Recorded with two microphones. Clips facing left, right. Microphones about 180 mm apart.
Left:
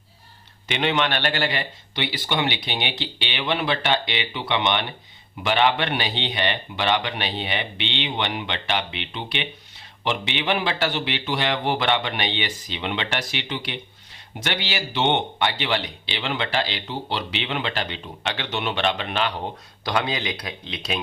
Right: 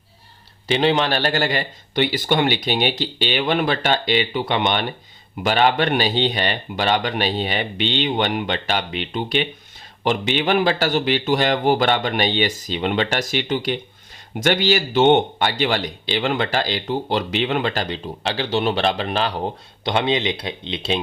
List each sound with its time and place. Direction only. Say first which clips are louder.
0.7 s speech: right 5 dB; 35° right (ahead or behind)
19.8 s speech: right 5 dB; 25° right (ahead or behind)